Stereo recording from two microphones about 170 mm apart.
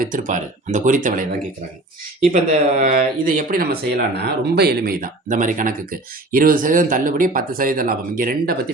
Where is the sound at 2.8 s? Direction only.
50° right (ahead or behind).